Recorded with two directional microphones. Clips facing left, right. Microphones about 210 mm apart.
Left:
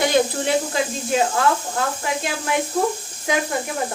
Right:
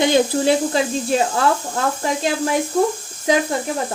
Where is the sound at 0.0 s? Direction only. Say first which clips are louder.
Right 3 dB; 30° right (ahead or behind).